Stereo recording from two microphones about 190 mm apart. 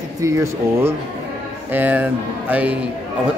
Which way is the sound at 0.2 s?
15° right (ahead or behind).